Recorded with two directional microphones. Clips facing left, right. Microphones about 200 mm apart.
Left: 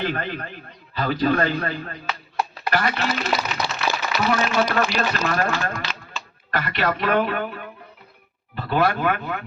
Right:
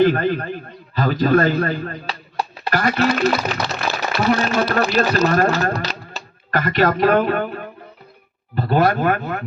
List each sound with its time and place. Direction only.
0.0 s a man's voice: 40° right (ahead or behind)